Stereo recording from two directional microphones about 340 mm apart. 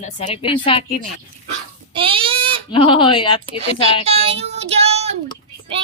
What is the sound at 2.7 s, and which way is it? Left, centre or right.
Speech, centre.